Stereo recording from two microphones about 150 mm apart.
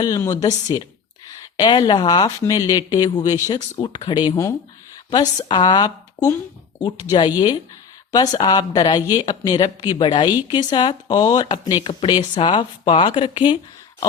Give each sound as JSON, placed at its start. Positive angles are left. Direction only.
{"t": 0.0, "sound": "speech", "side_deg": 20}